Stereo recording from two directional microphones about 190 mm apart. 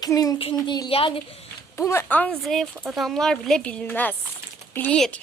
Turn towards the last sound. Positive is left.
turn(degrees=5)  # may be behind; listen again after turning